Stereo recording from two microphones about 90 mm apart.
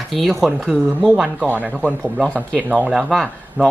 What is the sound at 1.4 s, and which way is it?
Speech, 15° right (ahead or behind).